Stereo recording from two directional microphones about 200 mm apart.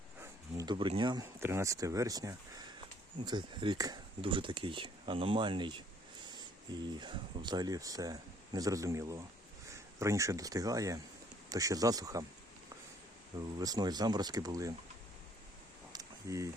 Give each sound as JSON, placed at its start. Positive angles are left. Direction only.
{"t": 0.2, "sound": "speech", "side_deg": -20}
{"t": 7.0, "sound": "speech", "side_deg": -20}
{"t": 13.6, "sound": "speech", "side_deg": -20}
{"t": 15.9, "sound": "a sound", "side_deg": -15}